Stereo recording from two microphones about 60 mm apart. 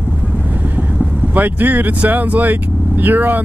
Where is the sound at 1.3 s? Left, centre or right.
Right.